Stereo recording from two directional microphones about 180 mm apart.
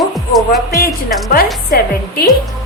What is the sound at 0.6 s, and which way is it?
A woman's voice, 55° left (ahead or behind).